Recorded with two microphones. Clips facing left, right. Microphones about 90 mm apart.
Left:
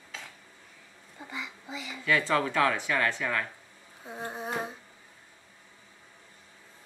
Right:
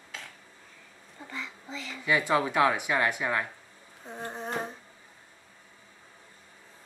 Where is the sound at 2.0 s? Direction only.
15° right (ahead or behind).